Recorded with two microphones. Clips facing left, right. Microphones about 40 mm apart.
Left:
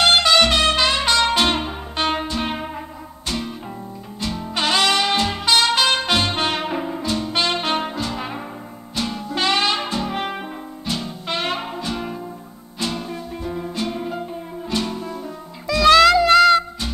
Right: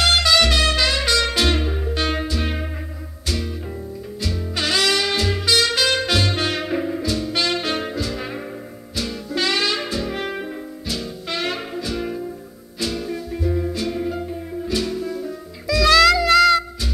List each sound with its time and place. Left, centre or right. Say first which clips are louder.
0.0 s music: left 2 dB; centre
4.2 s music: left 2 dB; left